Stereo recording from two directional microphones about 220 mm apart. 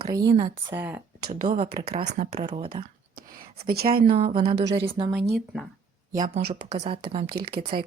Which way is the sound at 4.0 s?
30° right (ahead or behind).